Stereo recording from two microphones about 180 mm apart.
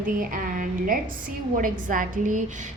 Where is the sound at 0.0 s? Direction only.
50° right (ahead or behind).